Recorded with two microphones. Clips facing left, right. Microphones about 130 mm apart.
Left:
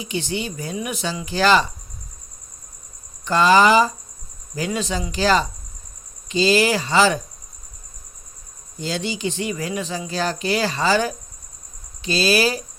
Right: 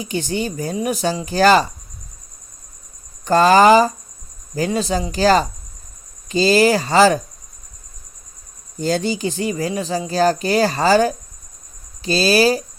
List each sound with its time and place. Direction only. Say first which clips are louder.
0.0 s speech: right 4 dB; 45° right (ahead or behind)
3.2 s speech: right 4 dB; 45° right (ahead or behind)
8.8 s speech: right 5 dB; 45° right (ahead or behind)